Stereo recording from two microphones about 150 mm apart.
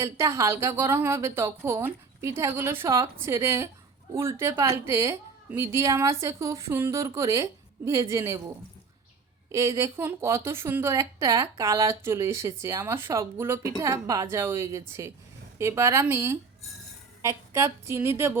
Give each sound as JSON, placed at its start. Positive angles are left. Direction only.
{"t": 0.0, "sound": "a woman's voice", "side_deg": -20}
{"t": 9.5, "sound": "a woman's voice", "side_deg": -20}